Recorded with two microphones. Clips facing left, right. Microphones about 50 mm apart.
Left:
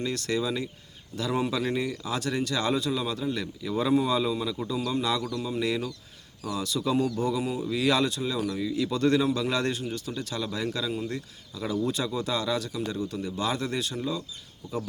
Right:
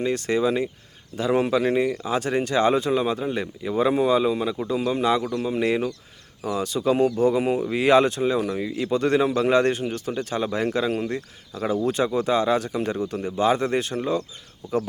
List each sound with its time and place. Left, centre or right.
0.0 s speech: right